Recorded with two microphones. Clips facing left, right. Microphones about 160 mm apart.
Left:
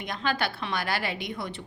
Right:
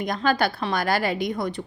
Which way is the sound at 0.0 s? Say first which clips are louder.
Right 7 dB; 40° right (ahead or behind).